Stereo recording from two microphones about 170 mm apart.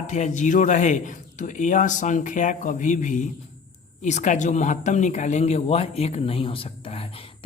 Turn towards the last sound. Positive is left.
turn(degrees=35)  # may be behind; listen again after turning